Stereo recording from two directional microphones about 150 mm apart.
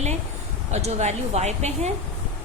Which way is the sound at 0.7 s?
45° right (ahead or behind).